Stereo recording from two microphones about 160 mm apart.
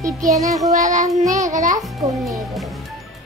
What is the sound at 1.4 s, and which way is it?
Speech, 50° right (ahead or behind).